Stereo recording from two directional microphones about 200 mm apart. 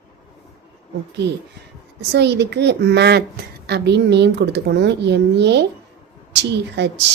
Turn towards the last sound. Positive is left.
turn(degrees=-60)  # may be behind; listen again after turning